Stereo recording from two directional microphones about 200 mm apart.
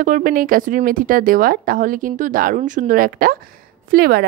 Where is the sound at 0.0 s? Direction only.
40° right (ahead or behind).